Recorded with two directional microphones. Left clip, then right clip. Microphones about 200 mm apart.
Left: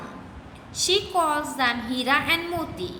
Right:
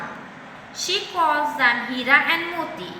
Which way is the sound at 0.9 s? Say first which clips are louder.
Right 1 dB; 55° left (ahead or behind).